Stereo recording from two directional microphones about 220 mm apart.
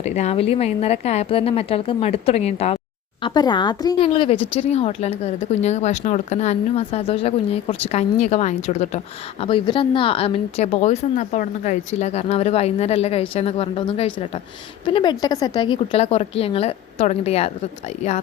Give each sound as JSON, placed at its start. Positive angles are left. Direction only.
{"t": 0.0, "sound": "a woman's voice", "side_deg": 30}